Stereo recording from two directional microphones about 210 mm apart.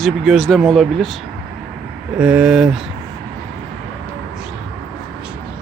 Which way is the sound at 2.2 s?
5° right (ahead or behind).